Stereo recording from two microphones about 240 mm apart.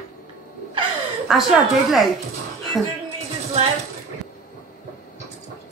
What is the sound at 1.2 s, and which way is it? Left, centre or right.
Speech, centre.